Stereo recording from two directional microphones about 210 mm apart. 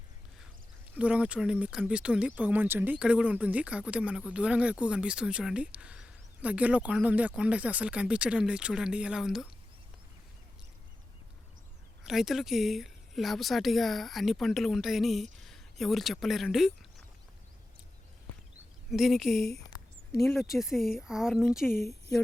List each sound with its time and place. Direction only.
0.9 s speech: 5° right (ahead or behind)
12.0 s speech: centre (ahead or behind)
18.9 s speech: centre (ahead or behind)